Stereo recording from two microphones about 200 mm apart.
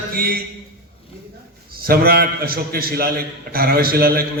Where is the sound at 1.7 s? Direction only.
50° right (ahead or behind).